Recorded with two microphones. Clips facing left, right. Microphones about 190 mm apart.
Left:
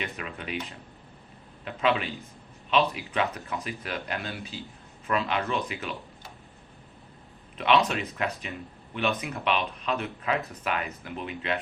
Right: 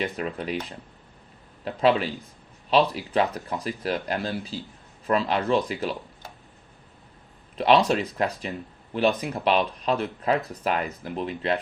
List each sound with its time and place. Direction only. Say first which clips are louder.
0.0 s speech: right 7 dB; 35° right (ahead or behind)
7.6 s speech: right 4 dB; 35° right (ahead or behind)